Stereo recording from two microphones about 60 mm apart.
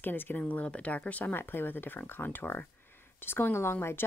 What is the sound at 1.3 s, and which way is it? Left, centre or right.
A woman's voice, left.